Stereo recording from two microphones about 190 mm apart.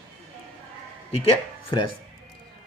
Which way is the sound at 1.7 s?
25° left (ahead or behind).